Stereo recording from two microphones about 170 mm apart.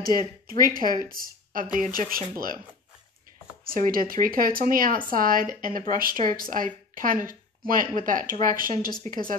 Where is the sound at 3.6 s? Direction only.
60° right (ahead or behind).